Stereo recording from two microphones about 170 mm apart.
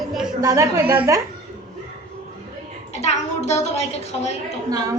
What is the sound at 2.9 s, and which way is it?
A woman's voice, 40° left (ahead or behind).